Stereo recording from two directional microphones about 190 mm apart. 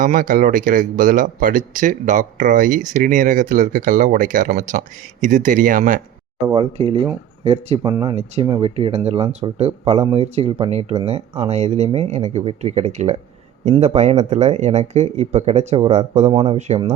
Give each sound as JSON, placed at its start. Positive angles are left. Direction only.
{"t": 0.0, "sound": "speech", "side_deg": -45}
{"t": 6.5, "sound": "speech", "side_deg": -30}
{"t": 7.8, "sound": "speech", "side_deg": -20}
{"t": 16.3, "sound": "speech", "side_deg": -25}
{"t": 16.6, "sound": "speech", "side_deg": -35}